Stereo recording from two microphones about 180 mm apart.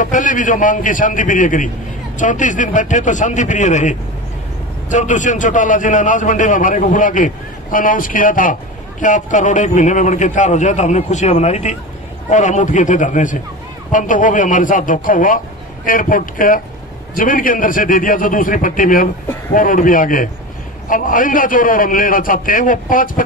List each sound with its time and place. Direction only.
0.0 s a man's voice: 45° left (ahead or behind)